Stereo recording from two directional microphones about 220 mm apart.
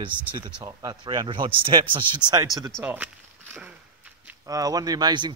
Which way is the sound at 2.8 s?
10° right (ahead or behind).